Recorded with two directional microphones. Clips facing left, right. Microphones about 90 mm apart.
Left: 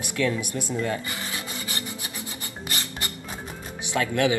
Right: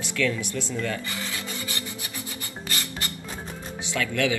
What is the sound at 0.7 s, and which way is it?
Filing, 25° left (ahead or behind).